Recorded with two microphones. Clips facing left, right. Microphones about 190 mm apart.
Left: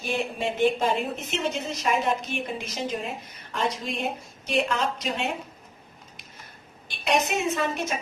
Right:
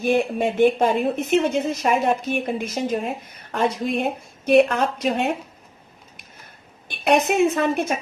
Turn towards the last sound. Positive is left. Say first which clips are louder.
# right 6 dB
turn(degrees=-55)  # may be behind; listen again after turning